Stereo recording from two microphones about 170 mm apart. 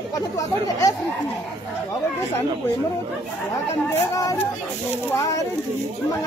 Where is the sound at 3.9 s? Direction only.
20° left (ahead or behind).